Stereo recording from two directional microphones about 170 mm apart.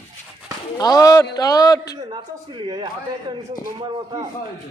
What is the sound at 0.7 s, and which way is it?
A man's voice, 20° left (ahead or behind).